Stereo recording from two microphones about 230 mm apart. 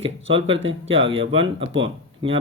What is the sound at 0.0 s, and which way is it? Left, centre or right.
Speech, right.